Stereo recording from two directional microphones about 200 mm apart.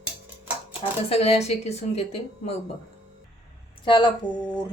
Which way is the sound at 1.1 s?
30° left (ahead or behind).